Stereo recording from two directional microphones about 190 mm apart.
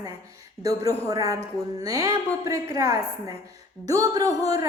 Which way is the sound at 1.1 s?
20° right (ahead or behind).